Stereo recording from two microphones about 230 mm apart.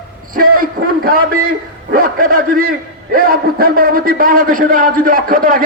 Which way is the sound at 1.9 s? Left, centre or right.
Right.